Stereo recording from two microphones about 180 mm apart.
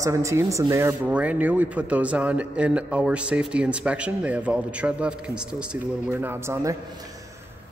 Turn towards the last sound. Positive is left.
turn(degrees=-15)  # may be behind; listen again after turning